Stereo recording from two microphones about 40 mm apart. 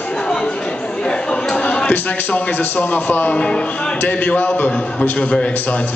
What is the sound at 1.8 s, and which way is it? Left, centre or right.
A man's voice, left.